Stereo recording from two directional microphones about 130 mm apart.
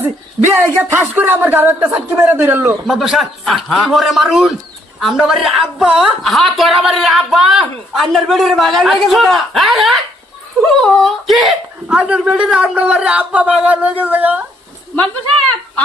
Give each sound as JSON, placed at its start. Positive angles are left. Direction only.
{"t": 0.4, "sound": "speech", "side_deg": -15}
{"t": 2.8, "sound": "a woman's voice", "side_deg": 0}